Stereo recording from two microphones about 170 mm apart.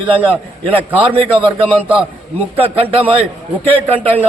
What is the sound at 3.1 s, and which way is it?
A man's voice, 35° right (ahead or behind).